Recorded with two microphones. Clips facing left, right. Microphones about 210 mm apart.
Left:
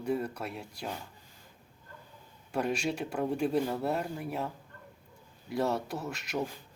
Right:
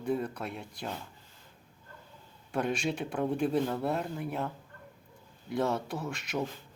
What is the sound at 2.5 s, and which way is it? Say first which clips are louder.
Speech: even; 5° left (ahead or behind).